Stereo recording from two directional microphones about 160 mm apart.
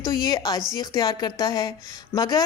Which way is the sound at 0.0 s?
25° left (ahead or behind).